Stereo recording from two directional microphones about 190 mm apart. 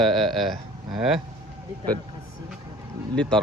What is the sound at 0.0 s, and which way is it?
Speech, centre (ahead or behind).